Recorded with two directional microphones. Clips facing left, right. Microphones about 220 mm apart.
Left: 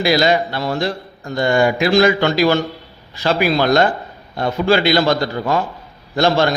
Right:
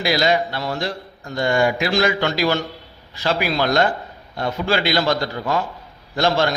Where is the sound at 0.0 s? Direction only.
55° left (ahead or behind).